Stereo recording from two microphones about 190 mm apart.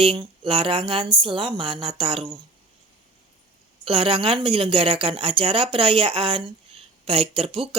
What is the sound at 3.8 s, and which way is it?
A woman's voice, 30° right (ahead or behind).